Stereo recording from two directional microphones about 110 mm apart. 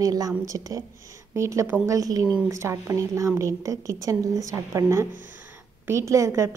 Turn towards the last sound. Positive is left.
turn(degrees=-25)  # may be behind; listen again after turning